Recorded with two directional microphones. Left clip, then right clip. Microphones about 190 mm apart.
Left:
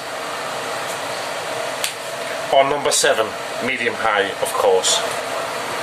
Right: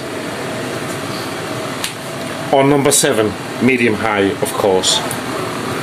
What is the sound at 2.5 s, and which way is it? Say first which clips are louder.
Speech: right 2 dB; 25° right (ahead or behind).